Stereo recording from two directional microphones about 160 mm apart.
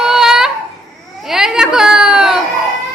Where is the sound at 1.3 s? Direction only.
5° right (ahead or behind).